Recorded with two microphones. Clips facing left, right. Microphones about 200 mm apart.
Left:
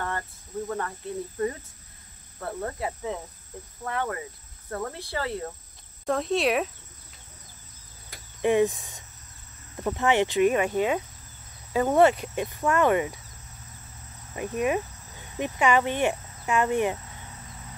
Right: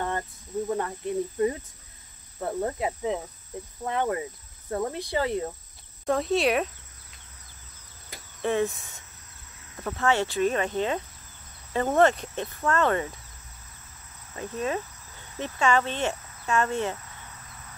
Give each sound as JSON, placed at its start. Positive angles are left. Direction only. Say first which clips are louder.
{"t": 0.7, "sound": "speech", "louder": "right 4 dB", "side_deg": -20}
{"t": 3.8, "sound": "cricket", "louder": "right 3 dB", "side_deg": -20}
{"t": 4.6, "sound": "speech", "louder": "right 4 dB", "side_deg": -15}
{"t": 6.0, "sound": "speech", "louder": "right 1 dB", "side_deg": 0}
{"t": 8.4, "sound": "speech", "louder": "left 4 dB", "side_deg": 15}
{"t": 14.3, "sound": "speech", "louder": "left 4 dB", "side_deg": 15}